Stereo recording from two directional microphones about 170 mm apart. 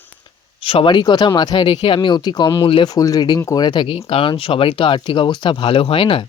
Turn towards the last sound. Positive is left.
turn(degrees=30)  # may be behind; listen again after turning